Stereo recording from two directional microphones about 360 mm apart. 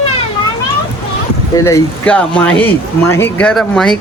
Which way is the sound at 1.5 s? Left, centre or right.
Centre.